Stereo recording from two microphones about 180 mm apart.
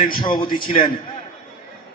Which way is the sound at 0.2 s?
25° left (ahead or behind).